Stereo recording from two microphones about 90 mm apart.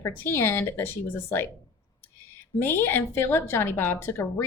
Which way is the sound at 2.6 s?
25° left (ahead or behind).